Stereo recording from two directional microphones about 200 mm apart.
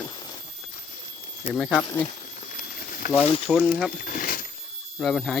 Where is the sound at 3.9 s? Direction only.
45° left (ahead or behind).